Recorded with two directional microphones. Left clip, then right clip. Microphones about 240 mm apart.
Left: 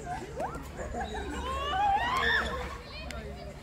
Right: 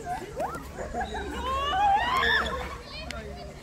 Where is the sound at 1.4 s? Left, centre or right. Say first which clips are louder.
Right 4 dB; centre.